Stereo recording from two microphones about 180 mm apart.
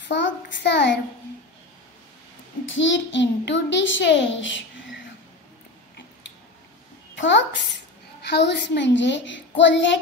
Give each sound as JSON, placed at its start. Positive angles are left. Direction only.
{"t": 0.1, "sound": "a child's voice", "side_deg": 80}
{"t": 2.6, "sound": "a child's voice", "side_deg": 90}
{"t": 7.2, "sound": "a child's voice", "side_deg": 80}